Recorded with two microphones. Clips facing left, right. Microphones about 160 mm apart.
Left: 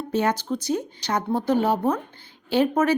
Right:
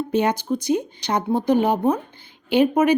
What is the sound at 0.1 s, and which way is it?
Speech, 15° right (ahead or behind).